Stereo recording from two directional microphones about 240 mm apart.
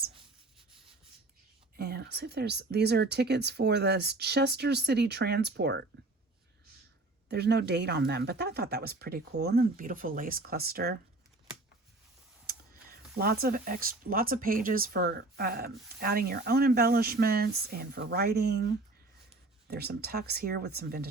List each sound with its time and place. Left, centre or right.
1.7 s speech: right
7.3 s speech: right
13.1 s speech: right